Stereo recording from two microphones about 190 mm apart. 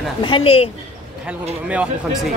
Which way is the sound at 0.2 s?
25° left (ahead or behind).